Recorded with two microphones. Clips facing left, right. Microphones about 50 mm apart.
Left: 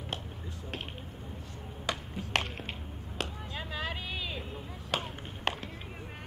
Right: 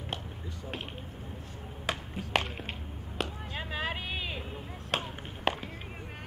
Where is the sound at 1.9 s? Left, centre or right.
Centre.